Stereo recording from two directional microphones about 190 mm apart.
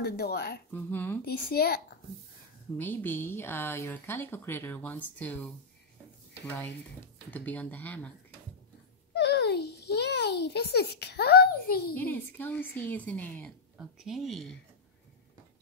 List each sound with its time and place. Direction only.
0.0 s a woman's voice: 55° left (ahead or behind)
0.7 s a woman's voice: 10° left (ahead or behind)
1.2 s a woman's voice: 55° left (ahead or behind)
2.8 s a woman's voice: 10° left (ahead or behind)
7.2 s a woman's voice: 10° left (ahead or behind)
9.1 s a child's voice: 60° left (ahead or behind)
11.9 s a woman's voice: 10° left (ahead or behind)